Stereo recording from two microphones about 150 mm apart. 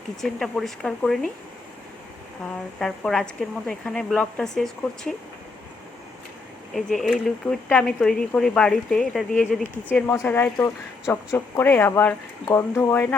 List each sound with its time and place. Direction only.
0.2 s speech: centre (ahead or behind)
2.4 s speech: 5° left (ahead or behind)
6.7 s speech: centre (ahead or behind)